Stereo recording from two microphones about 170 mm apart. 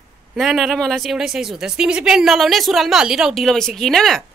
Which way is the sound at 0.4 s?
Centre (ahead or behind).